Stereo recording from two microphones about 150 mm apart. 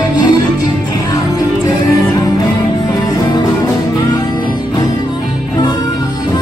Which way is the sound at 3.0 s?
30° left (ahead or behind).